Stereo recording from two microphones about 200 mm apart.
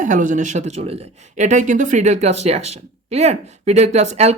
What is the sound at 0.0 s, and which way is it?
Speech, 40° right (ahead or behind).